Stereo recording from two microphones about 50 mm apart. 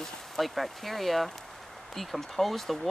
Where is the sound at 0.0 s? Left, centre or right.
Centre.